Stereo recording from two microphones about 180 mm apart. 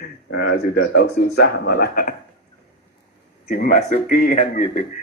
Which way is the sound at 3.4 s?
50° left (ahead or behind).